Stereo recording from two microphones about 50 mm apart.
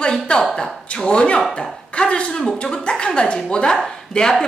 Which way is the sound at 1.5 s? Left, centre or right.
Left.